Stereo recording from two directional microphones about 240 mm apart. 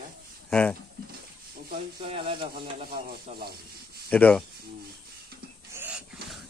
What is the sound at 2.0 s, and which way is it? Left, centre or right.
Speech, right.